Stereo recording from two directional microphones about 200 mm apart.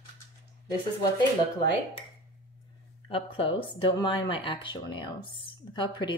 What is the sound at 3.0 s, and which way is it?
Speech, 25° left (ahead or behind).